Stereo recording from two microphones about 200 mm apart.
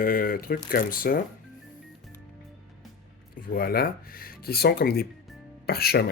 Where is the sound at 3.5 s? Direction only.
50° left (ahead or behind).